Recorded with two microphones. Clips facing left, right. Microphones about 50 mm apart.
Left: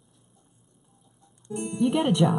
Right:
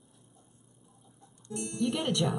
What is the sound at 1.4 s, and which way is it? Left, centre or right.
Speech, centre.